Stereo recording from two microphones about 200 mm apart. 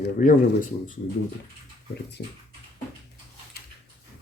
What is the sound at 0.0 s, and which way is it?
Speech, 40° left (ahead or behind).